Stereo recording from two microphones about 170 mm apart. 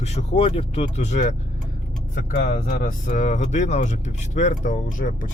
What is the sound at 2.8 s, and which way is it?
Speech, 50° left (ahead or behind).